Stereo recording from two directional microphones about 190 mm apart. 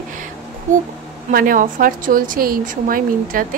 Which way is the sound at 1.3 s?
45° right (ahead or behind).